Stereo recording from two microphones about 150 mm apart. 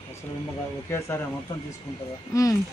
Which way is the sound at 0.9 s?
15° left (ahead or behind).